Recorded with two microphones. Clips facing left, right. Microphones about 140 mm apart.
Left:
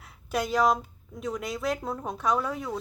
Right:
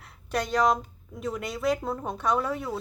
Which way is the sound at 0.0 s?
Centre (ahead or behind).